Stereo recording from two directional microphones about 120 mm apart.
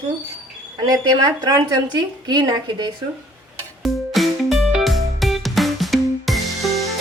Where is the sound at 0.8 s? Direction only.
35° right (ahead or behind).